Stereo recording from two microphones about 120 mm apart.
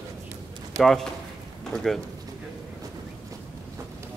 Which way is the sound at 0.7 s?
5° left (ahead or behind).